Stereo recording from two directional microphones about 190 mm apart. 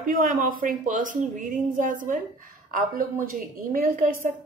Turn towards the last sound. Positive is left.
turn(degrees=-45)  # may be behind; listen again after turning